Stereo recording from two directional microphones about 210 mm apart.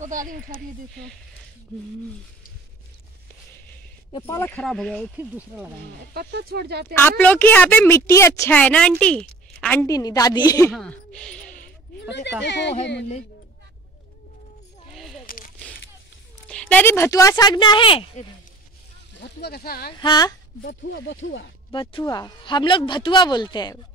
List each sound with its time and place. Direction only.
0.0 s speech: 40° right (ahead or behind)
4.1 s speech: 15° left (ahead or behind)
5.1 s speech: 5° right (ahead or behind)
6.1 s speech: 50° right (ahead or behind)
6.9 s a woman's voice: 10° left (ahead or behind)
10.7 s speech: 5° left (ahead or behind)
12.1 s speech: 55° left (ahead or behind)
15.2 s a sound: 40° left (ahead or behind)
16.4 s a woman's voice: 5° left (ahead or behind); by 18.2 s 25° left (ahead or behind)
19.1 s speech: 50° left (ahead or behind)
20.0 s speech: 20° left (ahead or behind)
20.6 s speech: 60° left (ahead or behind)
21.7 s speech: 20° left (ahead or behind)